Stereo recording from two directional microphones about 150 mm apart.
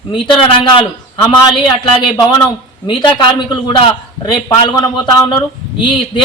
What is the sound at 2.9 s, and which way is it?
A man's voice, 30° left (ahead or behind).